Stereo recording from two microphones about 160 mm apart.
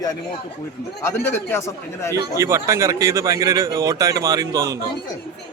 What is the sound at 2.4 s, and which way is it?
Speech, 20° right (ahead or behind).